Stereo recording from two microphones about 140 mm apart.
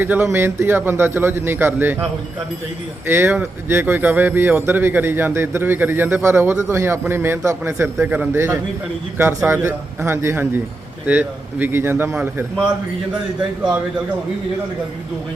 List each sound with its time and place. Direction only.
0.0 s speech: 15° right (ahead or behind)
3.1 s speech: 15° right (ahead or behind)